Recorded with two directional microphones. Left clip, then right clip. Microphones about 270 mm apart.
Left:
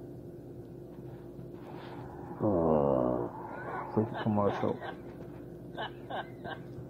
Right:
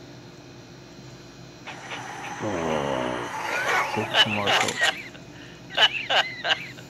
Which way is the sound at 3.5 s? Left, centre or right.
Right.